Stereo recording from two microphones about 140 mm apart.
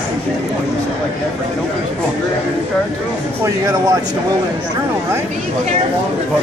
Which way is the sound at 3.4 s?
25° right (ahead or behind).